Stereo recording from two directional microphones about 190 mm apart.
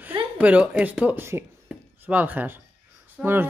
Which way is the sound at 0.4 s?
5° right (ahead or behind).